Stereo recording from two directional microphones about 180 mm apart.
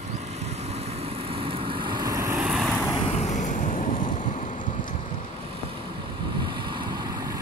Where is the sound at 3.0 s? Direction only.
35° left (ahead or behind).